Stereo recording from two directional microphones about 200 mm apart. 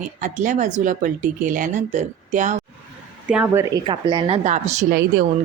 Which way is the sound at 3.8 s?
25° right (ahead or behind).